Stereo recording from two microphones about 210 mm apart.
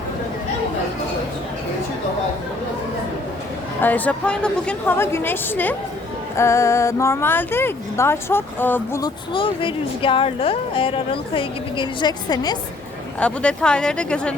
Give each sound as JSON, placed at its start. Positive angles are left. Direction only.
{"t": 3.8, "sound": "speech", "side_deg": 10}
{"t": 13.1, "sound": "speech", "side_deg": 5}